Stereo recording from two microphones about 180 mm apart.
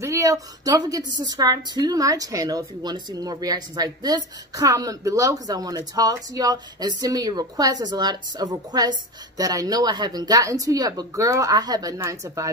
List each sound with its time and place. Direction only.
0.0 s a woman's voice: 15° right (ahead or behind)